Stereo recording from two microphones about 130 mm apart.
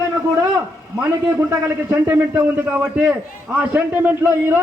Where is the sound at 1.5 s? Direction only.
15° right (ahead or behind).